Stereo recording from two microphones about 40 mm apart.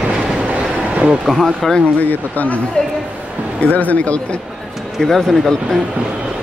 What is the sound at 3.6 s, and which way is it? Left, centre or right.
Speech, left.